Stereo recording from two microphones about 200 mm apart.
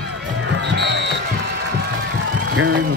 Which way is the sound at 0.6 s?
60° right (ahead or behind).